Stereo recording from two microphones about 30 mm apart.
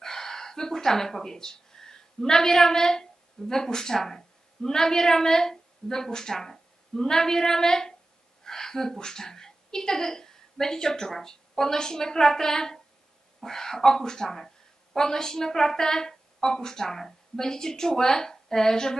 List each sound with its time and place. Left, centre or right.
0.0 s a woman's voice: centre